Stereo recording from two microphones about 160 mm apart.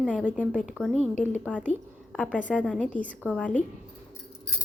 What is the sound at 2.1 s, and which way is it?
A woman's voice, 5° left (ahead or behind).